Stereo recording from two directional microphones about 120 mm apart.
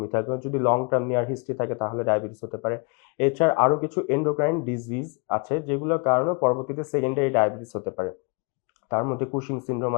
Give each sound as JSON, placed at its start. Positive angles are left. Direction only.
{"t": 0.0, "sound": "speech", "side_deg": 30}